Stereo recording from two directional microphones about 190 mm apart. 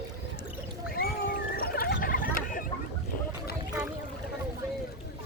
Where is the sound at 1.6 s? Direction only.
50° left (ahead or behind).